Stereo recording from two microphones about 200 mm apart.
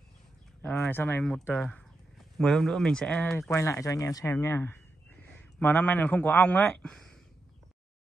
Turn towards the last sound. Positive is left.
turn(degrees=5)  # may be behind; listen again after turning